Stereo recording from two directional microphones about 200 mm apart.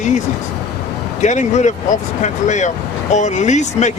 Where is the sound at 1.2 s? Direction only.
35° left (ahead or behind).